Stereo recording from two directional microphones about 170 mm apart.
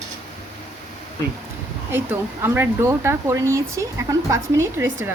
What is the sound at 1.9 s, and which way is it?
Speech, 10° right (ahead or behind).